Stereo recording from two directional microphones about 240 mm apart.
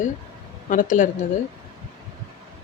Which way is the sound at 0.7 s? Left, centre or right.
Left.